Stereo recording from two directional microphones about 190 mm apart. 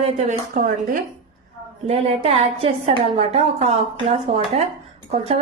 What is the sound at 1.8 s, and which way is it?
A woman's voice, 30° right (ahead or behind).